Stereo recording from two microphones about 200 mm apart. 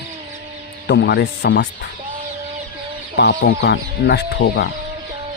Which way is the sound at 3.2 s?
55° left (ahead or behind).